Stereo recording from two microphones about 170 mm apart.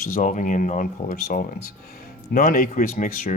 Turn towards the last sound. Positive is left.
turn(degrees=55)  # may be behind; listen again after turning